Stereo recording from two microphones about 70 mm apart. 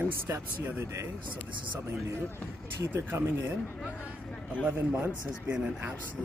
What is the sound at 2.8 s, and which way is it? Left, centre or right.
Speech, right.